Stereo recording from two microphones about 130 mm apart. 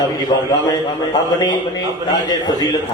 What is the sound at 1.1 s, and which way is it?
A man's voice, 35° left (ahead or behind).